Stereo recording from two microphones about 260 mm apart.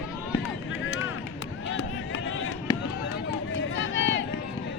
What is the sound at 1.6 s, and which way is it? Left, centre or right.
Run, left.